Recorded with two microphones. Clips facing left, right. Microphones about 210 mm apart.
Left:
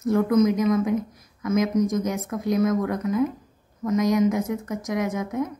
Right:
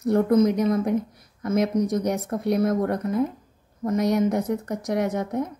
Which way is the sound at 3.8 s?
35° right (ahead or behind).